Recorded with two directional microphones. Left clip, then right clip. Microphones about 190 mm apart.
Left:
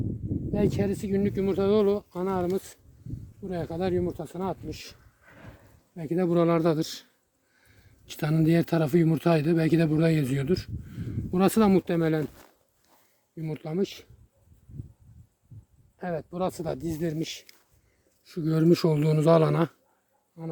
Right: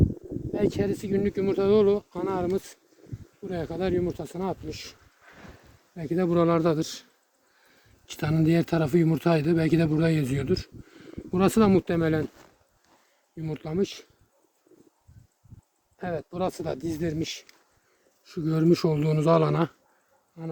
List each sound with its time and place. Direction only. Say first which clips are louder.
0.5 s speech: right 1 dB; 20° left (ahead or behind)
5.2 s a sound: right 2 dB; 40° right (ahead or behind)
6.0 s speech: right 1 dB; 25° left (ahead or behind)
12.2 s a sound: right 1 dB; 60° left (ahead or behind)
13.3 s speech: right 1 dB; 25° left (ahead or behind)
16.0 s speech: right 1 dB; 25° left (ahead or behind)